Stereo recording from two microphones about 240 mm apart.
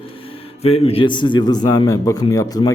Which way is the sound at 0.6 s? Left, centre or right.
Left.